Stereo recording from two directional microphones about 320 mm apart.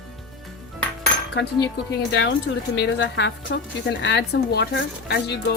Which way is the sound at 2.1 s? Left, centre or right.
Left.